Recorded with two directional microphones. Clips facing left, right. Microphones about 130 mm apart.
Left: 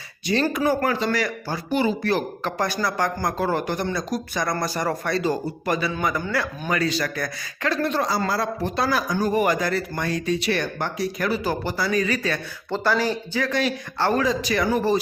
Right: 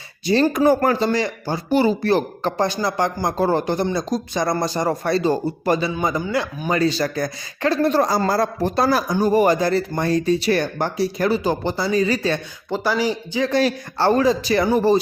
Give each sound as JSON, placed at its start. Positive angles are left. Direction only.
{"t": 0.5, "sound": "speech", "side_deg": -45}
{"t": 12.7, "sound": "speech", "side_deg": -10}
{"t": 13.5, "sound": "speech", "side_deg": -35}